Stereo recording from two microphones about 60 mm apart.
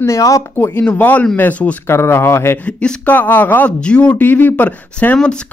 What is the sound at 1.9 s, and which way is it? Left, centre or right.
Speech, left.